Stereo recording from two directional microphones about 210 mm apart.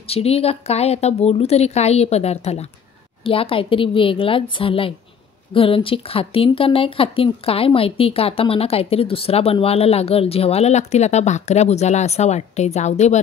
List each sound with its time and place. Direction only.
0.0 s speech: 30° left (ahead or behind)